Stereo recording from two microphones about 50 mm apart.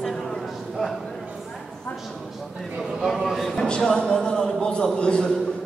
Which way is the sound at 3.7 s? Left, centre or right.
Centre.